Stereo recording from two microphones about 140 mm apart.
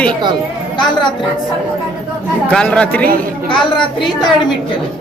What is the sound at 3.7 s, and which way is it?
Speech, 35° left (ahead or behind).